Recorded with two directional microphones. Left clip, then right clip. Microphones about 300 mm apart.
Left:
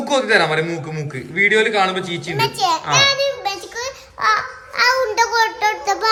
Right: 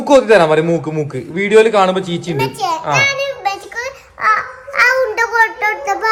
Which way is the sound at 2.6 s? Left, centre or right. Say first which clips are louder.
Right 1 dB; centre.